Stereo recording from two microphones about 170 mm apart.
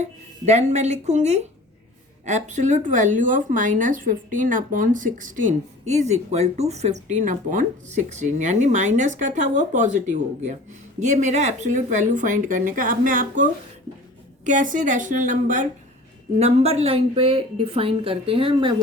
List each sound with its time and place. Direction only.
0.0 s a woman's voice: 40° right (ahead or behind)